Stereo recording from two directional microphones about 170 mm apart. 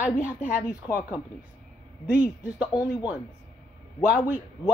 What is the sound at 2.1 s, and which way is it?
Speech, 5° right (ahead or behind).